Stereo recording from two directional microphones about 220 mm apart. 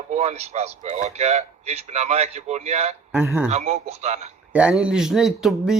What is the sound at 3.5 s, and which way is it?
Speech, 30° right (ahead or behind).